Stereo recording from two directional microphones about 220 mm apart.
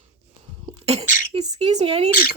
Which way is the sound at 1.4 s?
30° right (ahead or behind).